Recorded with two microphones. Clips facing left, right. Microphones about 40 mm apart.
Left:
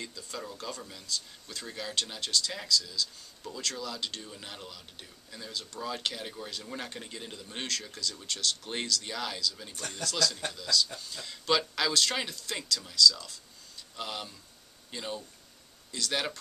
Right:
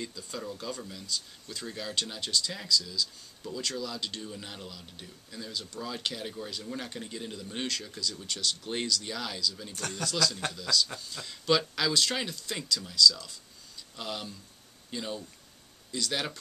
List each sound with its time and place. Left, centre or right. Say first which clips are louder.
0.0 s speech: right 2 dB; centre
3.7 s speech: right 1 dB; centre
9.8 s speech: right 3 dB; right
10.0 s speech: right 1 dB; centre